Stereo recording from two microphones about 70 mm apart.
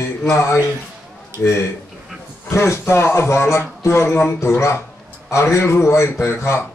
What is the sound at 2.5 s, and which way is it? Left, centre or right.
A man's voice, left.